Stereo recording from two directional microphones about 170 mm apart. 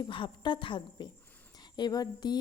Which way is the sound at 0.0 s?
30° left (ahead or behind).